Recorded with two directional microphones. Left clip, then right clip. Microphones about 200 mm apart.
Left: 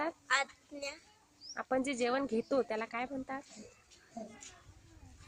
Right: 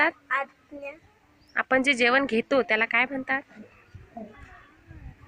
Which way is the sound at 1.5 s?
Centre (ahead or behind).